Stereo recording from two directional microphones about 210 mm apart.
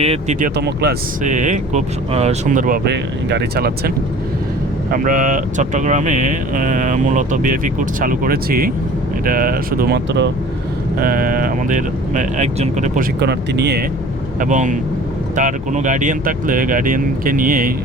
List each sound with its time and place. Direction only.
0.0 s speech: 30° right (ahead or behind); by 0.9 s 50° right (ahead or behind)
1.2 s speech: 35° right (ahead or behind); by 10.2 s 55° right (ahead or behind)
11.0 s speech: 40° right (ahead or behind)
13.1 s speech: 50° right (ahead or behind)
14.3 s speech: 35° right (ahead or behind)